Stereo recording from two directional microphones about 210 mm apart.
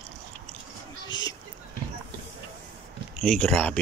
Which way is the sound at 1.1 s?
20° left (ahead or behind).